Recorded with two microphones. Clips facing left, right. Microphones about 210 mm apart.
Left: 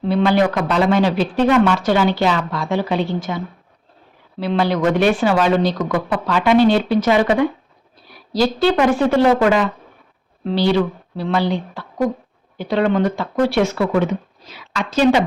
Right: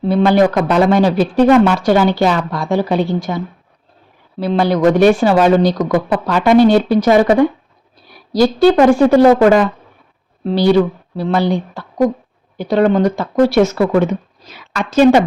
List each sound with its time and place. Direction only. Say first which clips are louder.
0.0 s speech: right 4 dB; 45° right (ahead or behind)
8.6 s speech: right 7 dB; 40° right (ahead or behind)
11.2 s a woman's voice: right 4 dB; 45° right (ahead or behind)